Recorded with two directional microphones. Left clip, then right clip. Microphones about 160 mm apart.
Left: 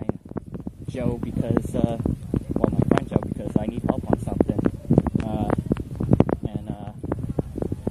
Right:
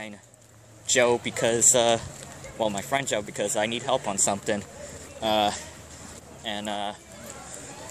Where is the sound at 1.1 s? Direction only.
15° right (ahead or behind).